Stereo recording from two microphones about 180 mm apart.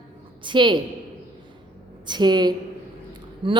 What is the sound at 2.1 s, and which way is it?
A woman's voice, 25° right (ahead or behind).